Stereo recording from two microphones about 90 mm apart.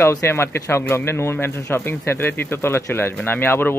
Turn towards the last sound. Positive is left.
turn(degrees=25)  # may be behind; listen again after turning